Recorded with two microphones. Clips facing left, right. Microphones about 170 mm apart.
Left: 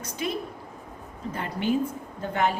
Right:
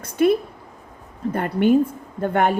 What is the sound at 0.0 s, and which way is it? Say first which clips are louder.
A woman's voice: right 13 dB; 55° right (ahead or behind).